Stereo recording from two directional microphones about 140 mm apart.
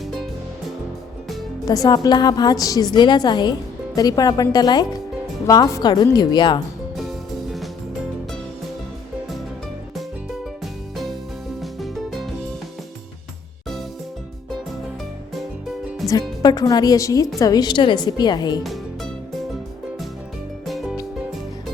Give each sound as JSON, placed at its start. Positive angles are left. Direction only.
{"t": 1.6, "sound": "a woman's voice", "side_deg": 25}
{"t": 11.6, "sound": "music", "side_deg": 0}
{"t": 16.0, "sound": "a woman's voice", "side_deg": 25}
{"t": 18.6, "sound": "music", "side_deg": 0}
{"t": 20.7, "sound": "music", "side_deg": 0}